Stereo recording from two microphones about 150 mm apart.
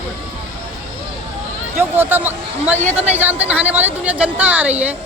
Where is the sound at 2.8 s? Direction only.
50° right (ahead or behind).